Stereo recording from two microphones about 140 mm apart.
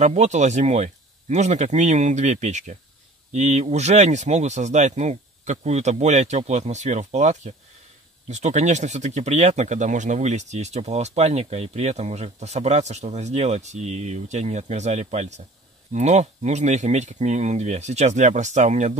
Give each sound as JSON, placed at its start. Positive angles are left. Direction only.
{"t": 0.0, "sound": "speech", "side_deg": -55}